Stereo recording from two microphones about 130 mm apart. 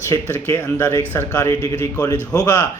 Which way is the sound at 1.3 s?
25° left (ahead or behind).